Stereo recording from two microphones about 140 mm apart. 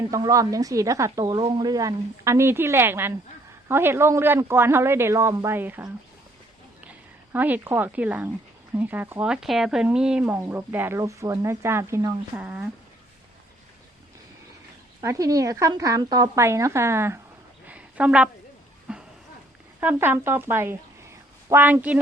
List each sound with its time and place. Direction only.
0.1 s speech: 25° right (ahead or behind)
1.2 s speech: 35° right (ahead or behind); by 5.9 s 15° right (ahead or behind)
7.3 s speech: 10° right (ahead or behind)
15.0 s speech: 25° right (ahead or behind)
17.7 s a sound: 10° right (ahead or behind)
19.8 s speech: 15° right (ahead or behind)